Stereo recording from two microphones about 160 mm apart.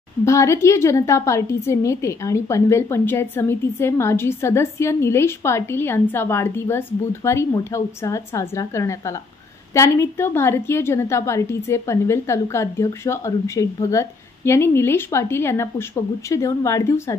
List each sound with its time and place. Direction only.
0.2 s a woman's voice: 20° left (ahead or behind)